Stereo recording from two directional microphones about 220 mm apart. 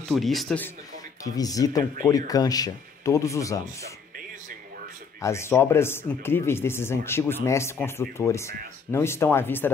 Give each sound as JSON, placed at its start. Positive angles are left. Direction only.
{"t": 0.1, "sound": "a man's voice", "side_deg": 0}
{"t": 1.2, "sound": "speech", "side_deg": 15}
{"t": 5.2, "sound": "speech", "side_deg": 10}